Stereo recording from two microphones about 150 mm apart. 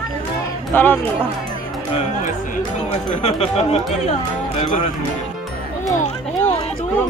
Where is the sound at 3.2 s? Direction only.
45° left (ahead or behind).